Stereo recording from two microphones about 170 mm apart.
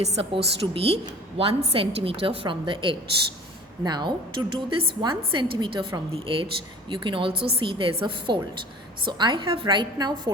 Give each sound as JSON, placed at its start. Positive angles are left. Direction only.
{"t": 0.0, "sound": "a woman's voice", "side_deg": -40}